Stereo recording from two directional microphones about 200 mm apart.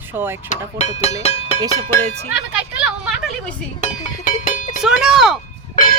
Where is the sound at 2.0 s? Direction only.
30° right (ahead or behind).